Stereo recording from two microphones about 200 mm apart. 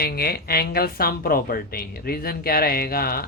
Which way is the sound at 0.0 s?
50° left (ahead or behind).